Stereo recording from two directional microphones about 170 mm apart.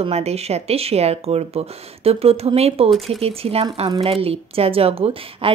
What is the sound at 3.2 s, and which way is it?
A woman's voice, 35° right (ahead or behind).